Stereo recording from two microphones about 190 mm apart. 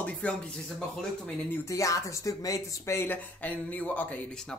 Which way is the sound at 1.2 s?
15° left (ahead or behind).